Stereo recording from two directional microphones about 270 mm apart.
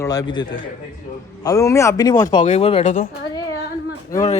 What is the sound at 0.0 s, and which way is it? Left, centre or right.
A man's voice, centre.